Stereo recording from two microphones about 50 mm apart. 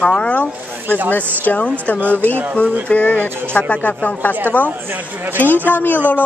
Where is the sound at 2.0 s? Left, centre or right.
Right.